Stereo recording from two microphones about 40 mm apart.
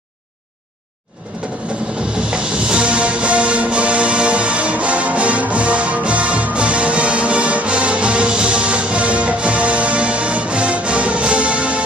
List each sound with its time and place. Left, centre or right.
2.1 s music: right